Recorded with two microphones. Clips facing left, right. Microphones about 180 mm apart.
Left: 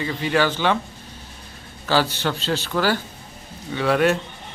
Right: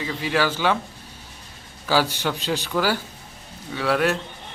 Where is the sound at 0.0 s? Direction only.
5° right (ahead or behind).